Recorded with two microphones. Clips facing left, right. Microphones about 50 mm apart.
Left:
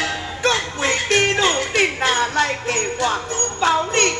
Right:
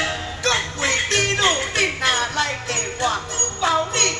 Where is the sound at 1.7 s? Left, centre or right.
Left.